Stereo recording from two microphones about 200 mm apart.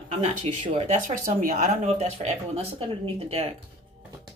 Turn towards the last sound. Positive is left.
turn(degrees=-30)  # may be behind; listen again after turning